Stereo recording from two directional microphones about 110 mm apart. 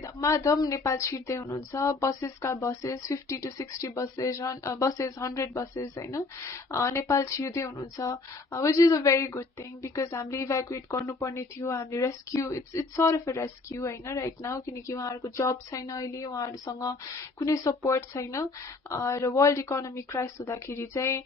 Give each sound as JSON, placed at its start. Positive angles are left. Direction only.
{"t": 0.0, "sound": "a woman's voice", "side_deg": 30}